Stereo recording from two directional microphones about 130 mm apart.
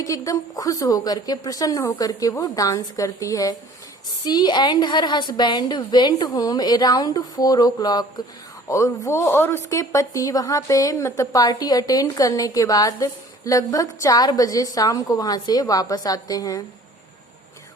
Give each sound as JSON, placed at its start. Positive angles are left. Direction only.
{"t": 0.0, "sound": "a woman's voice", "side_deg": 25}